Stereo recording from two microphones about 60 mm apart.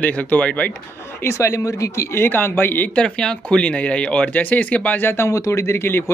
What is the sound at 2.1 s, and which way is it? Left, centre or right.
Speech, left.